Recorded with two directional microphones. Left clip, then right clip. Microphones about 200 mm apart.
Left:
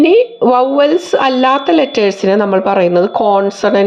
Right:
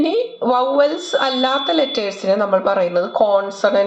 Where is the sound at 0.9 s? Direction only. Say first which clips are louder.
Left 7 dB; 50° left (ahead or behind).